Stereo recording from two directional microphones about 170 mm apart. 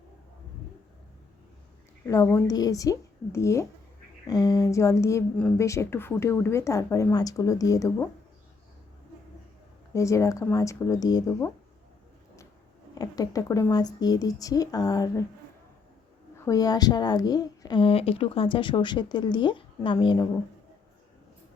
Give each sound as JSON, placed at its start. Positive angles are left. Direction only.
{"t": 2.0, "sound": "a woman's voice", "side_deg": 15}
{"t": 9.9, "sound": "a woman's voice", "side_deg": 20}
{"t": 12.9, "sound": "a woman's voice", "side_deg": 20}
{"t": 16.5, "sound": "a woman's voice", "side_deg": 20}